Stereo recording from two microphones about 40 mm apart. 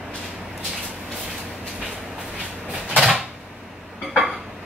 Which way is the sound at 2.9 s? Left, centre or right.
Centre.